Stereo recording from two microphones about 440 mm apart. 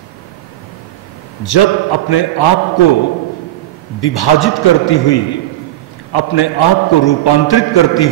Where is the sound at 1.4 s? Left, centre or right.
Left.